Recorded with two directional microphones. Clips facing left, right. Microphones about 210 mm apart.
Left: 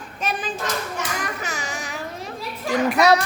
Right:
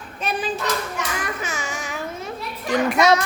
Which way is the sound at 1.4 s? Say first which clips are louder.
Right 1 dB; 40° left (ahead or behind).